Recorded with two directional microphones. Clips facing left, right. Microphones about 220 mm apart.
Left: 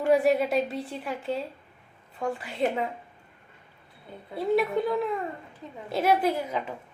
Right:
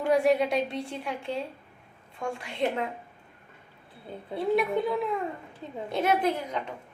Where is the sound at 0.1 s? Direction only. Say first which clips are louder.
Left 1 dB; centre (ahead or behind).